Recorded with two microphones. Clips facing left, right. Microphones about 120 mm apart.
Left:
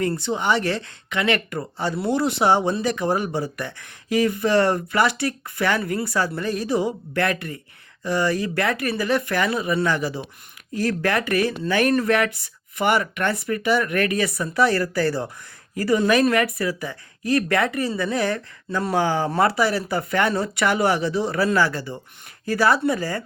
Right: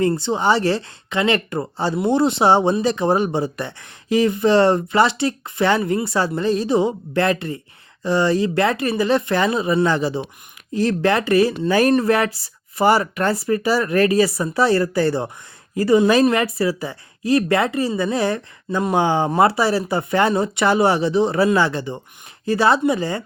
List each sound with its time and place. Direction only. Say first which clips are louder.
0.0 s speech: right 5 dB; 30° right (ahead or behind)